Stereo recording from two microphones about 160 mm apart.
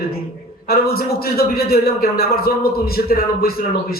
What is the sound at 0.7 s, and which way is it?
A man's voice, 70° left (ahead or behind).